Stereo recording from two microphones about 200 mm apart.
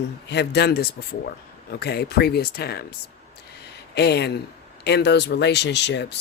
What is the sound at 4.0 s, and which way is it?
Speech, 55° left (ahead or behind).